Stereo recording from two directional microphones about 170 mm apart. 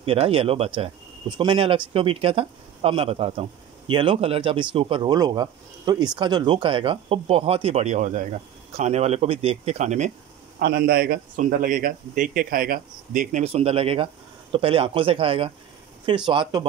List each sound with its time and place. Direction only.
0.0 s speech: 35° right (ahead or behind)
10.6 s a man's voice: 60° right (ahead or behind); by 16.6 s 25° right (ahead or behind)